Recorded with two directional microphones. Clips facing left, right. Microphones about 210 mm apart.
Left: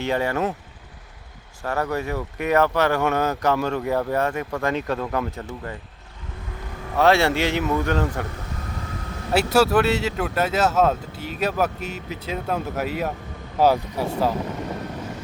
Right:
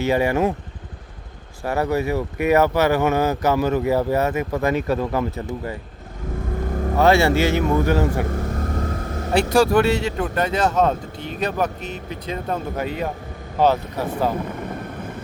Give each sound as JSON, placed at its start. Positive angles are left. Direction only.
{"t": 0.0, "sound": "speech", "side_deg": -10}
{"t": 1.6, "sound": "speech", "side_deg": -10}
{"t": 6.7, "sound": "vehicle", "side_deg": -45}
{"t": 6.9, "sound": "speech", "side_deg": 0}
{"t": 8.3, "sound": "vehicle", "side_deg": -45}
{"t": 9.3, "sound": "speech", "side_deg": 5}